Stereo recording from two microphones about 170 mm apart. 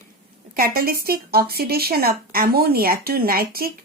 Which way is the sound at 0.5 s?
60° right (ahead or behind).